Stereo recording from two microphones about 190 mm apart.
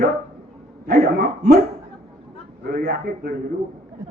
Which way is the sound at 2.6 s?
50° right (ahead or behind).